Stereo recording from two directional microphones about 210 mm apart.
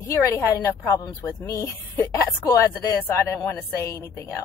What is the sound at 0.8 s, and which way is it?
A woman's voice, 15° left (ahead or behind).